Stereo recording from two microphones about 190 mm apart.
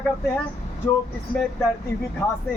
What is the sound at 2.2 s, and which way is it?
Speech, 15° left (ahead or behind).